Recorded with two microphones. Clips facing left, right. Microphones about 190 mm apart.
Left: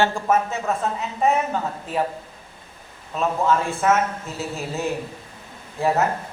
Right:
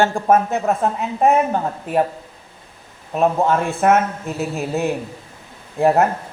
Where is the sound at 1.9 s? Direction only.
55° right (ahead or behind).